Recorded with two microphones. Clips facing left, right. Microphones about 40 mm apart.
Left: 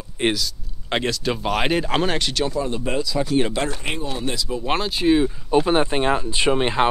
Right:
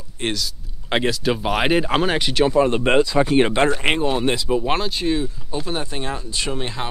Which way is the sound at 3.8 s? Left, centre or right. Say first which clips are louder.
Right 8 dB; right.